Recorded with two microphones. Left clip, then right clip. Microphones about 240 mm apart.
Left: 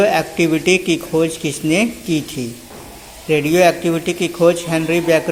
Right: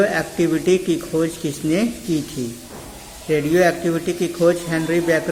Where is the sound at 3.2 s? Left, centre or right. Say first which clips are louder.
Left 4 dB; centre.